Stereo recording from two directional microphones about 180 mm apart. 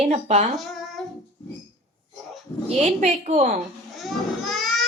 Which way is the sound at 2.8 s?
40° right (ahead or behind).